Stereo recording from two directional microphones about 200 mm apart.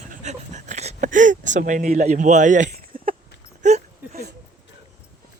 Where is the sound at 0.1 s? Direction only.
35° right (ahead or behind).